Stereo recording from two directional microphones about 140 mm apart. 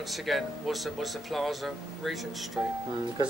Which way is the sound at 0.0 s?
Centre (ahead or behind).